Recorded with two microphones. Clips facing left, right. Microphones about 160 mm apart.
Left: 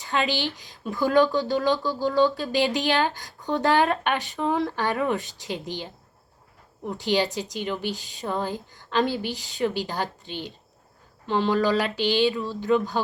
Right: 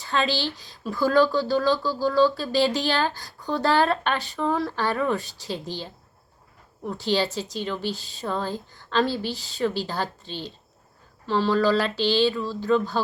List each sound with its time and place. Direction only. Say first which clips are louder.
0.0 s speech: right 1 dB; 15° left (ahead or behind)